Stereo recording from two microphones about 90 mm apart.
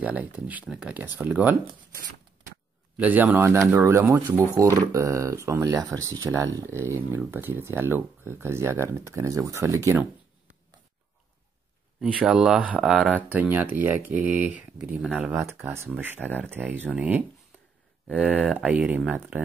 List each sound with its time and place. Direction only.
0.0 s speech: 15° right (ahead or behind)
3.0 s speech: 20° right (ahead or behind)
3.7 s speech: 30° right (ahead or behind)
12.0 s speech: 5° right (ahead or behind)
12.8 s speech: centre (ahead or behind)
13.3 s speech: 20° right (ahead or behind)
15.4 s speech: 30° right (ahead or behind)
18.0 s speech: 5° right (ahead or behind)